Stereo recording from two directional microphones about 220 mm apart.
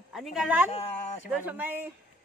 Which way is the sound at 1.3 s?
5° right (ahead or behind).